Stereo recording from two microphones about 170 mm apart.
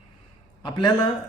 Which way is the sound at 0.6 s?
25° left (ahead or behind).